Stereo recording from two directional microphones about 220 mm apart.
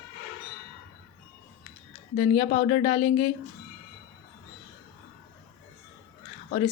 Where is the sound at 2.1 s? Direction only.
30° left (ahead or behind).